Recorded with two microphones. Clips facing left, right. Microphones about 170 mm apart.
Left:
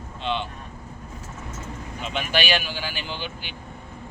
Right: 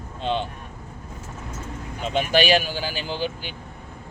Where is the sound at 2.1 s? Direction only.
35° right (ahead or behind).